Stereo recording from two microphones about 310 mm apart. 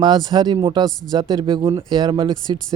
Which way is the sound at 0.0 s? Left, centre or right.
Centre.